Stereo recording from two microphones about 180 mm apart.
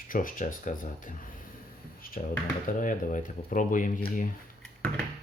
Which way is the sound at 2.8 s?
45° left (ahead or behind).